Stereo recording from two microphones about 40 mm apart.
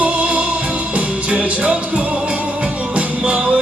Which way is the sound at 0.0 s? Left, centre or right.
Right.